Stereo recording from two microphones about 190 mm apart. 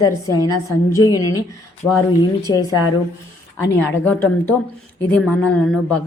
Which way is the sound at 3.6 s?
10° left (ahead or behind).